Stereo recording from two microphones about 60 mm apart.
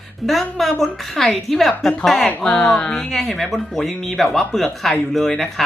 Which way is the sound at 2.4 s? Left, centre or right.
Centre.